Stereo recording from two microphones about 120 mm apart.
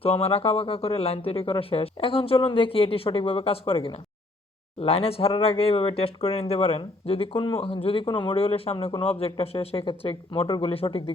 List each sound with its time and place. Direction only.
0.0 s speech: 55° left (ahead or behind)